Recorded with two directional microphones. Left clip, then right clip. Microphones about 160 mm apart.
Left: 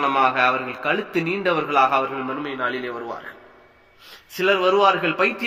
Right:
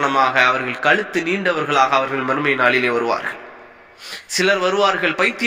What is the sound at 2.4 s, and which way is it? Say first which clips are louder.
Speech: right 13 dB; 30° right (ahead or behind).